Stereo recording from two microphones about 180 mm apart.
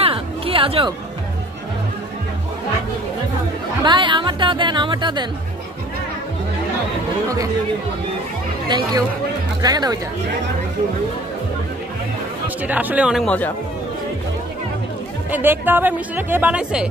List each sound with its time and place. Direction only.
0.0 s music: 30° right (ahead or behind)
3.8 s speech: 25° right (ahead or behind)
8.6 s speech: 25° right (ahead or behind)
12.6 s speech: 10° right (ahead or behind)
15.3 s speech: 10° right (ahead or behind)